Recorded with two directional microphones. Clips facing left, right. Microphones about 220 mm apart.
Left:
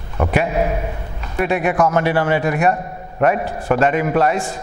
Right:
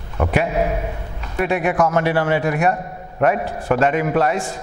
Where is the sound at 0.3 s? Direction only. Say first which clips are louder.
Left 1 dB; 15° left (ahead or behind).